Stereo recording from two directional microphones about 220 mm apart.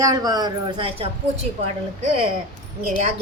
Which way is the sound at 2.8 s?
30° right (ahead or behind).